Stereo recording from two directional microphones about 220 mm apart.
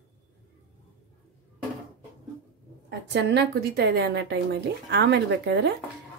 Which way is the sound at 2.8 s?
50° right (ahead or behind).